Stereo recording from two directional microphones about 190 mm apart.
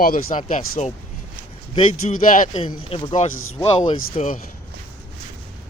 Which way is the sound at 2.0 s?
35° left (ahead or behind).